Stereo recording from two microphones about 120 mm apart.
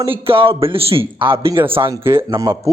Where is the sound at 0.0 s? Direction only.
45° right (ahead or behind).